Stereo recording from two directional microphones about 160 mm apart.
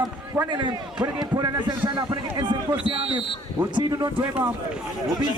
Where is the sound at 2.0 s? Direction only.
30° right (ahead or behind).